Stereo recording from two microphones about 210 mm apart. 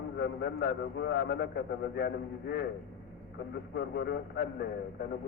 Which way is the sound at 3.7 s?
50° left (ahead or behind).